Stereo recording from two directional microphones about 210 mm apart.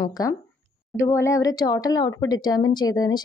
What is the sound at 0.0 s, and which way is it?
Speech, 15° left (ahead or behind).